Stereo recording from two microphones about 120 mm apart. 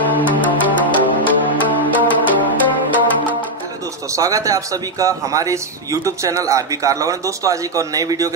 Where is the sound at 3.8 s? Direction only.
25° right (ahead or behind).